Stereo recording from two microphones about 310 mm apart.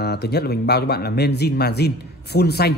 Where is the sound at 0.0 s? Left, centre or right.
Left.